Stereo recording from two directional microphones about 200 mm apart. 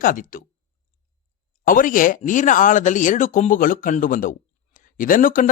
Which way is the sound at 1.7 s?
40° left (ahead or behind).